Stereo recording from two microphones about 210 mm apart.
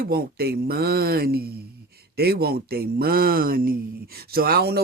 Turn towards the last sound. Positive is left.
turn(degrees=-50)  # may be behind; listen again after turning